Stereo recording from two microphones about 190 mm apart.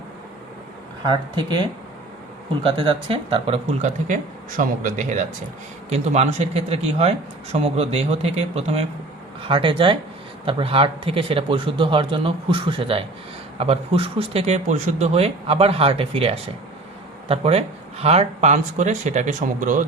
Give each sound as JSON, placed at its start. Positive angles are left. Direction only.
{"t": 1.0, "sound": "speech", "side_deg": -25}
{"t": 2.6, "sound": "speech", "side_deg": -30}